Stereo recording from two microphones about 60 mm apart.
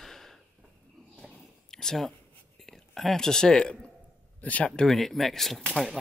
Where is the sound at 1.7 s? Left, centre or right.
Centre.